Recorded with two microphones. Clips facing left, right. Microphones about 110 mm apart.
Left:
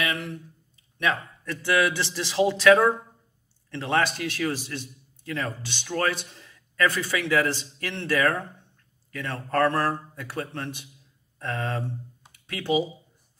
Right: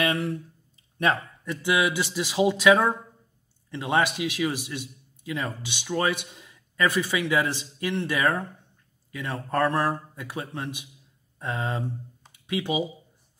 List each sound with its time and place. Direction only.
0.0 s a man's voice: 35° right (ahead or behind)
1.4 s a man's voice: 15° right (ahead or behind)